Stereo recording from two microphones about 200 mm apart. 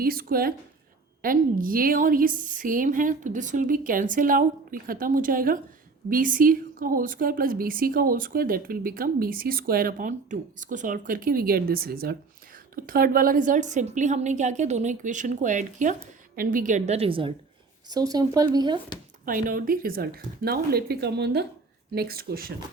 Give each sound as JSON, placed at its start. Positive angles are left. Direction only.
{"t": 0.0, "sound": "a woman's voice", "side_deg": -45}
{"t": 19.2, "sound": "a woman's voice", "side_deg": -45}